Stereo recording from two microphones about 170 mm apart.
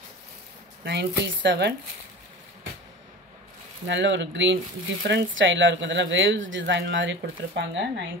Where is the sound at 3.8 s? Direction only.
90° right.